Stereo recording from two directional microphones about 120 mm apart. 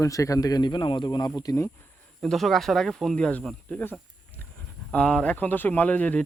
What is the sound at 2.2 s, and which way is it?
Speech, centre (ahead or behind).